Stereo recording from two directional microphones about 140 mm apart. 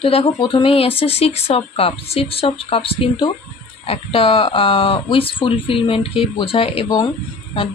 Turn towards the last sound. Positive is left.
turn(degrees=35)  # may be behind; listen again after turning